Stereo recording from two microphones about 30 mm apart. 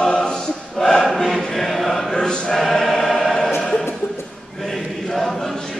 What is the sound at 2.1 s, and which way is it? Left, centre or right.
Choir, left.